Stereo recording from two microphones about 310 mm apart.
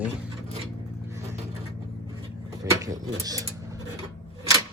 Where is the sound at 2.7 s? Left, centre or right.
Centre.